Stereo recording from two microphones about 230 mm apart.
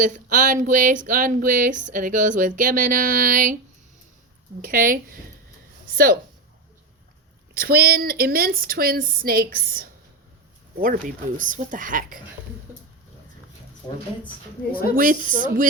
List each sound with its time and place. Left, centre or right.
0.0 s a woman's voice: right
4.6 s a woman's voice: right
7.6 s a woman's voice: right
14.9 s a woman's voice: right